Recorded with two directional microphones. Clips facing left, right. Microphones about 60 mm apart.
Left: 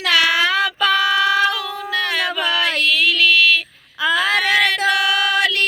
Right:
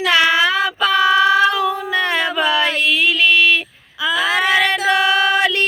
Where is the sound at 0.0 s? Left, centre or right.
Right.